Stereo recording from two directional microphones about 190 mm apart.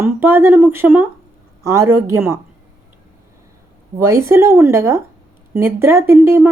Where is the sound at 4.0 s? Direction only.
15° right (ahead or behind).